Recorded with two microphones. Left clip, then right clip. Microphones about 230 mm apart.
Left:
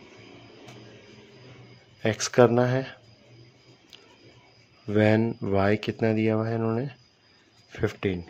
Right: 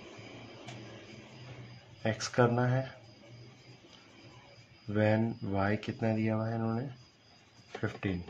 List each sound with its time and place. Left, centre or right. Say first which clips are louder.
2.0 s speech: left 9 dB; left
4.9 s speech: left 8 dB; left
7.8 s speech: left 9 dB; left